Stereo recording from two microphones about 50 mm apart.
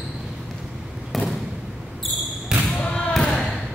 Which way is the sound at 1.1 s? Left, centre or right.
Centre.